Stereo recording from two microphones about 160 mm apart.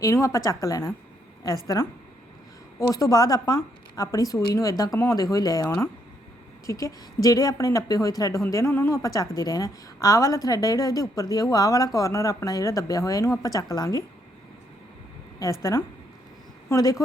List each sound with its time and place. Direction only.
0.0 s a woman's voice: 20° left (ahead or behind)
6.7 s a woman's voice: 20° left (ahead or behind)
15.4 s a woman's voice: 25° left (ahead or behind)
16.6 s a woman's voice: 20° left (ahead or behind)